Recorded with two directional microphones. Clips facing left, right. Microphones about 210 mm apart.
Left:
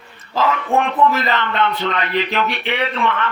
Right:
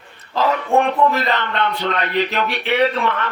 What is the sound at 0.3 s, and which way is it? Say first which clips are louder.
Speech: right 1 dB; 40° right (ahead or behind).